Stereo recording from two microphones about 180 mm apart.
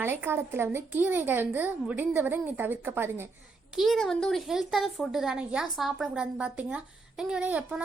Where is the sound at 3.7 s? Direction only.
Centre (ahead or behind).